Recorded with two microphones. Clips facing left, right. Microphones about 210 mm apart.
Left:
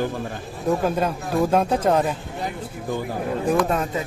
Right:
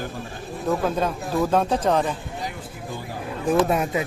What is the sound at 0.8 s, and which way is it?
A man's voice, 10° left (ahead or behind).